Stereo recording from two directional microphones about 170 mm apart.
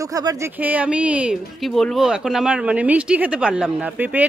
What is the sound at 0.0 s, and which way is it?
Speech, 20° right (ahead or behind).